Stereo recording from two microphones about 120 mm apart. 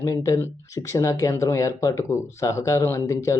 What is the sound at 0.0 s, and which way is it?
Speech, 25° left (ahead or behind).